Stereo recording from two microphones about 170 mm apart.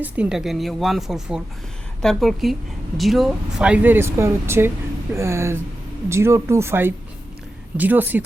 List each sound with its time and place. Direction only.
0.0 s speech: 5° right (ahead or behind)